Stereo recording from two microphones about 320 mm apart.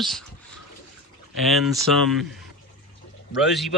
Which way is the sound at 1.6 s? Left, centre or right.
Centre.